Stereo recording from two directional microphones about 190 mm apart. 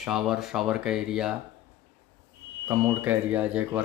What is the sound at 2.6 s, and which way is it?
Speech, 10° right (ahead or behind).